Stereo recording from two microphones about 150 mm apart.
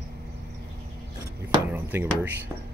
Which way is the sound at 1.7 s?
15° right (ahead or behind).